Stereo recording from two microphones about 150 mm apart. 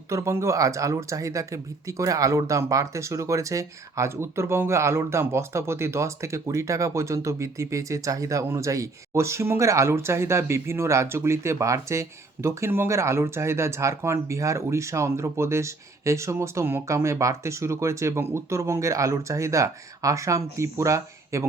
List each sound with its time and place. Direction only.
0.1 s speech: 20° right (ahead or behind)